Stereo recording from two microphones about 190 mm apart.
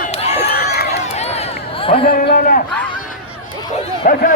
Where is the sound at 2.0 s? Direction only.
55° left (ahead or behind).